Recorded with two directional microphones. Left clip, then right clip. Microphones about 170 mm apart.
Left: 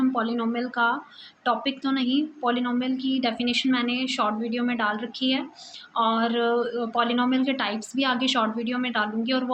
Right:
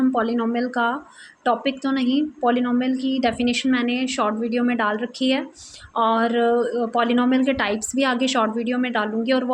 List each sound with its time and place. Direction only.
0.0 s a woman's voice: 40° right (ahead or behind)